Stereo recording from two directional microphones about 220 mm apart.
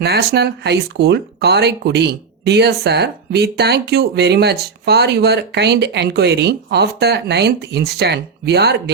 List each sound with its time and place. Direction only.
0.0 s speech: 45° right (ahead or behind)